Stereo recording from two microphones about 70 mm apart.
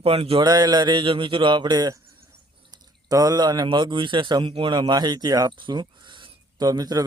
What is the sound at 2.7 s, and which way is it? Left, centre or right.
Speech, right.